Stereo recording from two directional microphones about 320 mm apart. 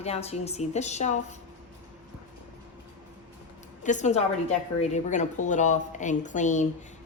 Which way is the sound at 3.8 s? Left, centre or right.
Left.